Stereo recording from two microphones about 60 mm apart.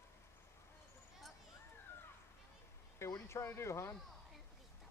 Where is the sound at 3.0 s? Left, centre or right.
Left.